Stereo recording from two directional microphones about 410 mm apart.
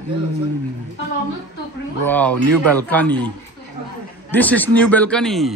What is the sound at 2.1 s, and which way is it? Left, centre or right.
A man's voice, centre.